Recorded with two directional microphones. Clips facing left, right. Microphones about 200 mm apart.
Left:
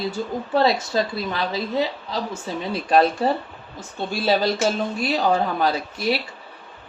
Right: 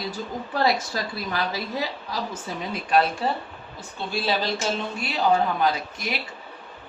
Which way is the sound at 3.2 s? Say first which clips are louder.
Left 5 dB; 50° left (ahead or behind).